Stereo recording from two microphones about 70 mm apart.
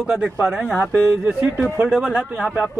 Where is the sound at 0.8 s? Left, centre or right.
Right.